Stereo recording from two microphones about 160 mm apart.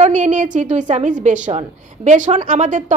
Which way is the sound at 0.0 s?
50° right (ahead or behind).